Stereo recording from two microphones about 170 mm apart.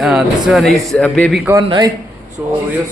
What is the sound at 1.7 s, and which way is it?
Speech, 25° right (ahead or behind).